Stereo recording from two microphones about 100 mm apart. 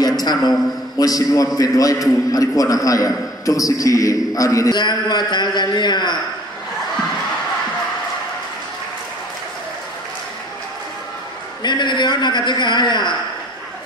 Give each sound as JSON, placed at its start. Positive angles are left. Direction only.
{"t": 0.2, "sound": "a man's voice", "side_deg": 40}
{"t": 4.7, "sound": "a man's voice", "side_deg": 45}
{"t": 11.6, "sound": "a man's voice", "side_deg": 50}